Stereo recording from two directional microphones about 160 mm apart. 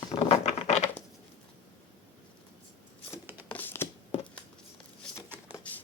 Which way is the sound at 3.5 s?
15° left (ahead or behind).